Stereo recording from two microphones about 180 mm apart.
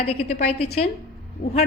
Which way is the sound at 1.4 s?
50° left (ahead or behind).